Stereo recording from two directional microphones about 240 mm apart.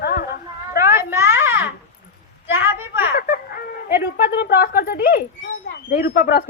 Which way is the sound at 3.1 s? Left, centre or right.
Left.